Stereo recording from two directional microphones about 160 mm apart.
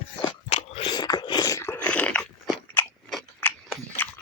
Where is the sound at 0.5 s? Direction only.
40° left (ahead or behind).